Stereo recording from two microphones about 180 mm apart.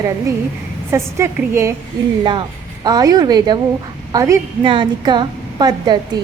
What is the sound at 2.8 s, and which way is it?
A woman's voice, 20° right (ahead or behind).